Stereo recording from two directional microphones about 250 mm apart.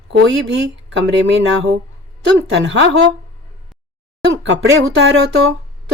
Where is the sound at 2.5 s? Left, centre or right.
Right.